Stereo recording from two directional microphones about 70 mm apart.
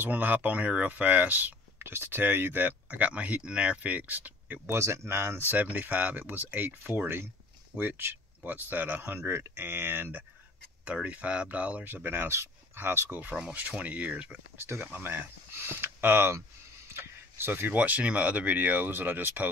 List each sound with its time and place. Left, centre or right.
0.0 s speech: right
1.8 s speech: right
4.6 s speech: right
5.5 s speech: right
10.9 s speech: centre
13.2 s speech: right